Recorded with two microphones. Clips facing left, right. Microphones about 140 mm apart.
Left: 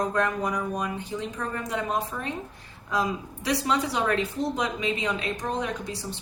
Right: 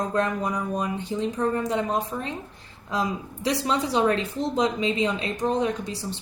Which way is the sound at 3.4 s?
25° right (ahead or behind).